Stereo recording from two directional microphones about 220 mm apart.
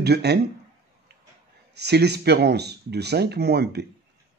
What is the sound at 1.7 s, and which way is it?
Speech, 50° right (ahead or behind).